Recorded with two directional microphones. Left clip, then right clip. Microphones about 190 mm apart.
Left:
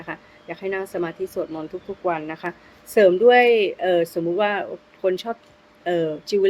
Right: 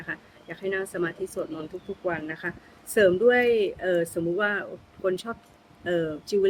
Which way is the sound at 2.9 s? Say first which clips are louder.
Left 6 dB; 20° right (ahead or behind).